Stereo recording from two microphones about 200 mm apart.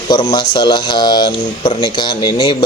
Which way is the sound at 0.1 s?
20° left (ahead or behind).